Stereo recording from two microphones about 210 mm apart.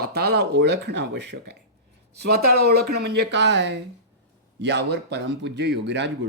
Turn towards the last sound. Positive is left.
turn(degrees=-55)  # may be behind; listen again after turning